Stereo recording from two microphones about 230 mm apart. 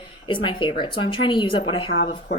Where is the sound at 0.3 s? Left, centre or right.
Left.